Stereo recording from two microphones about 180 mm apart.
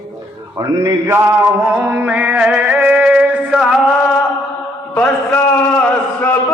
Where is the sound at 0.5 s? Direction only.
20° right (ahead or behind).